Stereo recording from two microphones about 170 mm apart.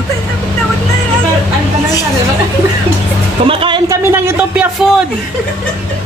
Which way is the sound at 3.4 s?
30° right (ahead or behind).